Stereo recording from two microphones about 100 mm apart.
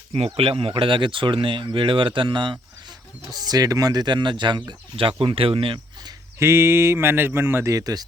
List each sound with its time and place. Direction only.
0.3 s speech: 65° right (ahead or behind)
3.4 s speech: 40° right (ahead or behind); by 5.1 s 55° right (ahead or behind)
5.2 s speech: 70° right (ahead or behind)
6.4 s speech: 30° right (ahead or behind)